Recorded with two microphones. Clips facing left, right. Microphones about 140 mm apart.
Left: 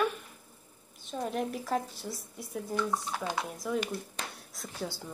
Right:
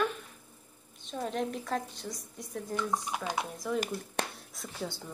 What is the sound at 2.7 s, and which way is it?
Speech, 15° right (ahead or behind).